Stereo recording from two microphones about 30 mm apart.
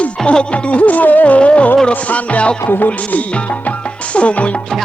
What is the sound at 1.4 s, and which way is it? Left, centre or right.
Speech, left.